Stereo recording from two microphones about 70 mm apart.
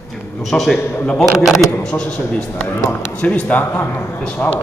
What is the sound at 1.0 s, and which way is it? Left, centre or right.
A man's voice, centre.